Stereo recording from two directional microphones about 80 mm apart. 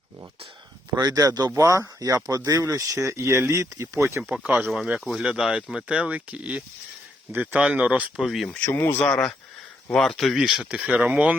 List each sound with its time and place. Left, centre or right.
0.9 s speech: right
1.5 s speech: right
4.6 s speech: centre
8.1 s speech: centre
8.4 s speech: left
9.0 s speech: centre